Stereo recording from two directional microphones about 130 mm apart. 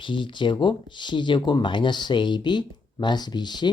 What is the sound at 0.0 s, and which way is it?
Speech, 40° left (ahead or behind).